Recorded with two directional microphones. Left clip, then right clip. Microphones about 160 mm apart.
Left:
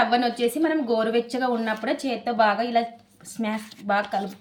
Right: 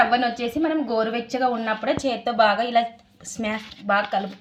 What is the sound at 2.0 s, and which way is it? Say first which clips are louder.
A woman's voice: right 2 dB; 40° right (ahead or behind).